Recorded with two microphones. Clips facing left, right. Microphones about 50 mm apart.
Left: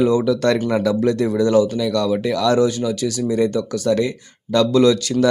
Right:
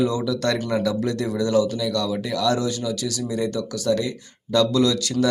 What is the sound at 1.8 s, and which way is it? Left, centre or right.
Speech, left.